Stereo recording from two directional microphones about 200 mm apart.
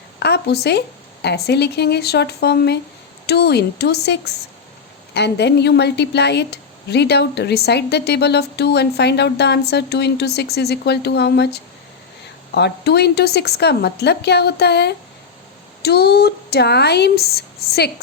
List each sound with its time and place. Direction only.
0.2 s a woman's voice: 55° left (ahead or behind)